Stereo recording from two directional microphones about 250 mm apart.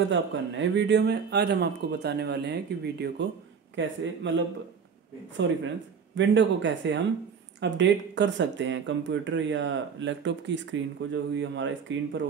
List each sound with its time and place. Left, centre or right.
0.1 s a man's voice: right
6.1 s speech: right